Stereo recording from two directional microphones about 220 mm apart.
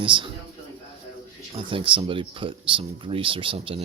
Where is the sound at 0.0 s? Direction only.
25° right (ahead or behind).